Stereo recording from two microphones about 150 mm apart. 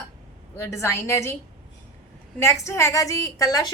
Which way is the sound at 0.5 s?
20° left (ahead or behind).